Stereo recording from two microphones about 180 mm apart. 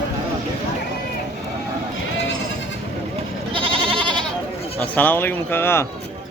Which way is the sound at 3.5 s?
30° right (ahead or behind).